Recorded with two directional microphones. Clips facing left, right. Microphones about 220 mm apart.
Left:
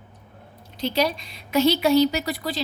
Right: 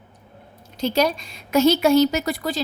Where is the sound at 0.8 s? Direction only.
45° right (ahead or behind).